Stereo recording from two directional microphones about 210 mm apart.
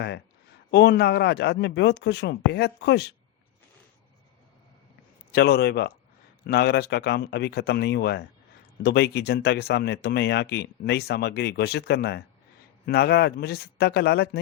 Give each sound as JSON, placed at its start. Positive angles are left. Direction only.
{"t": 0.7, "sound": "speech", "side_deg": 50}
{"t": 5.3, "sound": "speech", "side_deg": 50}